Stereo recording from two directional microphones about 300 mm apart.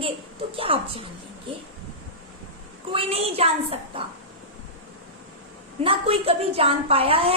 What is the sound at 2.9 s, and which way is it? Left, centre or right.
A woman's voice, centre.